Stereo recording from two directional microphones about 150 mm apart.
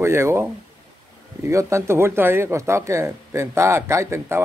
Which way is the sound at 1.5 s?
20° right (ahead or behind).